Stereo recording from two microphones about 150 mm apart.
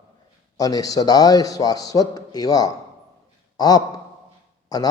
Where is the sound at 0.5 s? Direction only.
25° left (ahead or behind).